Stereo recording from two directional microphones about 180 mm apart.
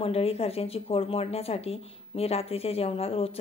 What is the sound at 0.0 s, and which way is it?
Speech, 35° left (ahead or behind).